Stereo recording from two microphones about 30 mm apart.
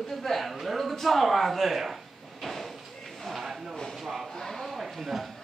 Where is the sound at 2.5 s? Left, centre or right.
Centre.